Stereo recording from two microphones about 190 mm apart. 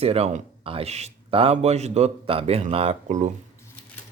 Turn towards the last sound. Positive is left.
turn(degrees=-40)  # may be behind; listen again after turning